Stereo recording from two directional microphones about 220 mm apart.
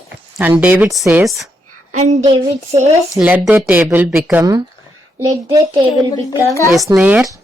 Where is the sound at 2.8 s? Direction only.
10° right (ahead or behind).